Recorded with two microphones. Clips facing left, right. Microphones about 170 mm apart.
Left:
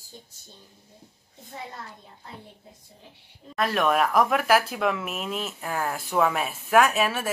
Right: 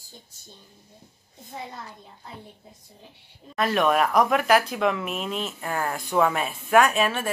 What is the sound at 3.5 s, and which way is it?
Speech, centre (ahead or behind).